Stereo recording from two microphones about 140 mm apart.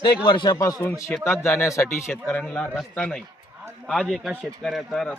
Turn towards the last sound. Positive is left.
turn(degrees=0)  # may be behind; listen again after turning